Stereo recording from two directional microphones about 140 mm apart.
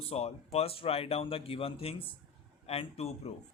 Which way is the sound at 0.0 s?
45° left (ahead or behind).